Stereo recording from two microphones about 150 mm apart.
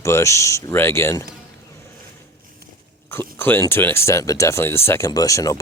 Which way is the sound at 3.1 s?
15° left (ahead or behind).